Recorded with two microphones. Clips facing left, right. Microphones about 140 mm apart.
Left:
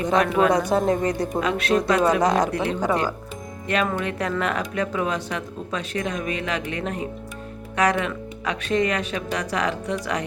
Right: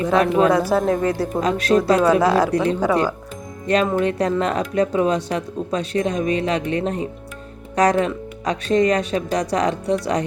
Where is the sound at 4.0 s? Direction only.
35° right (ahead or behind).